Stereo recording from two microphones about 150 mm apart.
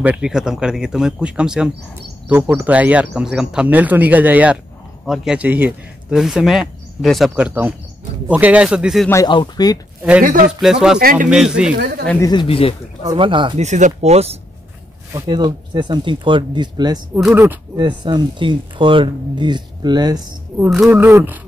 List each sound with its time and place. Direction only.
0.0 s speech: 5° right (ahead or behind)
9.3 s speech: 30° left (ahead or behind)
10.2 s speech: 55° right (ahead or behind)
10.6 s speech: 5° right (ahead or behind)
11.0 s speech: 75° right (ahead or behind)
11.2 s speech: 5° right (ahead or behind)
12.2 s speech: 30° left (ahead or behind)
13.0 s speech: 30° right (ahead or behind)
13.6 s speech: 50° right (ahead or behind)
15.1 s speech: 30° right (ahead or behind)
17.2 s speech: 10° right (ahead or behind)
17.7 s speech: 30° right (ahead or behind)
20.9 s speech: 15° right (ahead or behind)